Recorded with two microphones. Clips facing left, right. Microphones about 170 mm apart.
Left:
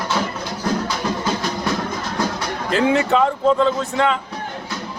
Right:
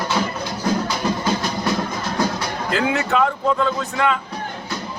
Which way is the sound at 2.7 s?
25° left (ahead or behind).